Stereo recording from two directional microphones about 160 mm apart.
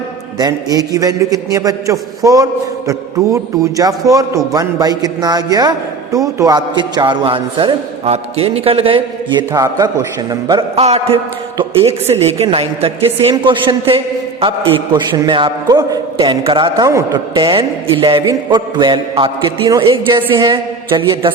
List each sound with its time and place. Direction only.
0.3 s a man's voice: 25° right (ahead or behind)
9.5 s a man's voice: 20° right (ahead or behind)
10.8 s a man's voice: 40° right (ahead or behind)